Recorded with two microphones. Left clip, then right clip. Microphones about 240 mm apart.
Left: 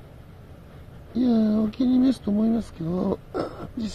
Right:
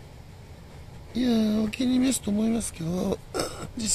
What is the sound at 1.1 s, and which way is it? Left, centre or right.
Speech, centre.